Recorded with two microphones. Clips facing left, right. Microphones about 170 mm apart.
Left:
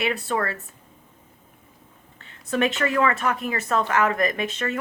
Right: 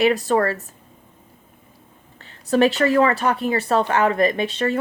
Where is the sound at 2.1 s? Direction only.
35° right (ahead or behind).